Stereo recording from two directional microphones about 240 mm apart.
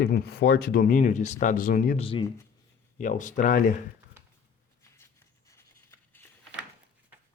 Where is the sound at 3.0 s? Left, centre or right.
Left.